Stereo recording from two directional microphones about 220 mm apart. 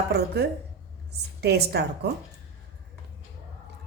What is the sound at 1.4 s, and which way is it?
Speech, 50° right (ahead or behind).